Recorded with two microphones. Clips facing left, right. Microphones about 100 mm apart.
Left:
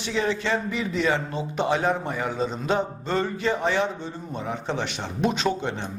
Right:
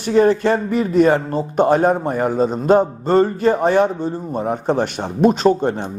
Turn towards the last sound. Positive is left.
turn(degrees=-40)  # may be behind; listen again after turning